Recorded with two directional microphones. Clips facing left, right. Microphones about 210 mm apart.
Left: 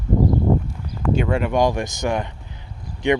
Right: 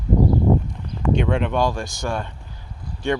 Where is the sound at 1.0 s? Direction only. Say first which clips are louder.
Even; 5° left (ahead or behind).